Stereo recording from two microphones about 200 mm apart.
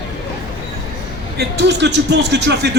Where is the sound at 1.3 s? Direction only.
60° right (ahead or behind).